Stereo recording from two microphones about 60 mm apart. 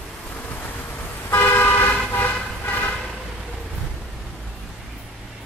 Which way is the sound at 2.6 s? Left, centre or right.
Left.